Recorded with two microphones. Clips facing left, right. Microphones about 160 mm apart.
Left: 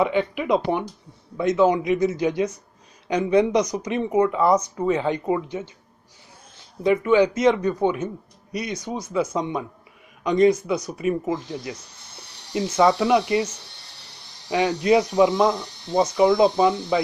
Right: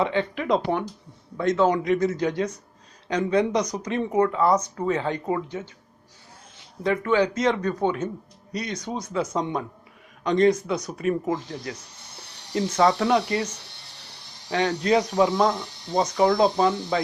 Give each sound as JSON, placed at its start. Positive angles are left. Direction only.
{"t": 0.0, "sound": "speech", "side_deg": 15}
{"t": 6.8, "sound": "speech", "side_deg": 15}
{"t": 12.8, "sound": "speech", "side_deg": 10}
{"t": 14.5, "sound": "speech", "side_deg": 15}